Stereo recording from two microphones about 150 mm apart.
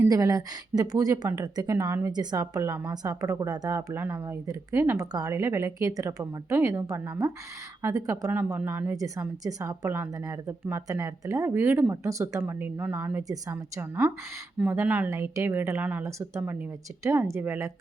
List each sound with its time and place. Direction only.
0.0 s a woman's voice: 20° right (ahead or behind)